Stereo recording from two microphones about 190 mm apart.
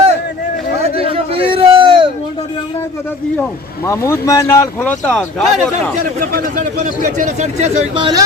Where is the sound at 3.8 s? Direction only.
15° left (ahead or behind).